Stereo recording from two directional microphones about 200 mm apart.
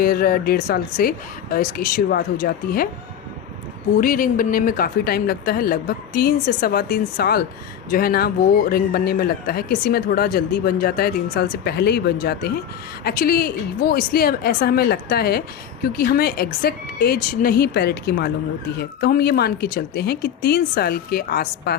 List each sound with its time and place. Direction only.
0.0 s speech: 45° left (ahead or behind)
3.9 s speech: 45° left (ahead or behind)